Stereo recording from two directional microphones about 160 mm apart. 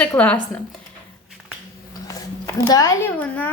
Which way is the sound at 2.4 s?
20° left (ahead or behind).